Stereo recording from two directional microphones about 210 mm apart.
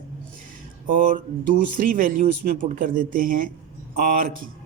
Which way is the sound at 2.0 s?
40° right (ahead or behind).